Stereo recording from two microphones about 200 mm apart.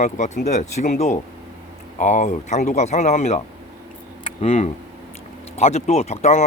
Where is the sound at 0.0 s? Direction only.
35° left (ahead or behind).